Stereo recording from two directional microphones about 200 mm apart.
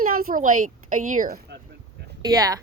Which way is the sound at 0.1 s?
45° right (ahead or behind).